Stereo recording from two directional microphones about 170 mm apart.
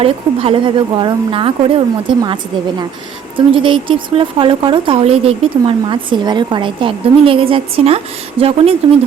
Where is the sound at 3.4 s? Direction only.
30° right (ahead or behind).